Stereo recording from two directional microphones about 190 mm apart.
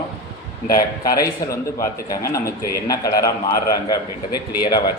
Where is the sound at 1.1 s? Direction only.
15° left (ahead or behind).